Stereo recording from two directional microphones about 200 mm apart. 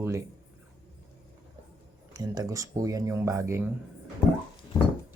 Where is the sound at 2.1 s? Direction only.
20° right (ahead or behind).